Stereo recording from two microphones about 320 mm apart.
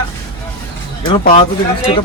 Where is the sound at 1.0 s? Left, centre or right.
Centre.